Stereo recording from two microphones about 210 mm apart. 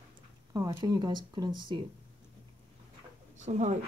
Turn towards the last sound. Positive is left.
turn(degrees=-35)  # may be behind; listen again after turning